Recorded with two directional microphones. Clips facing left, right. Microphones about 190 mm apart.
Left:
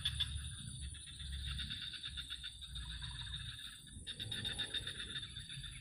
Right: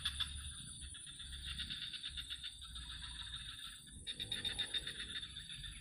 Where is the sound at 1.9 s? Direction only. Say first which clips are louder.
Left 3 dB; 45° left (ahead or behind).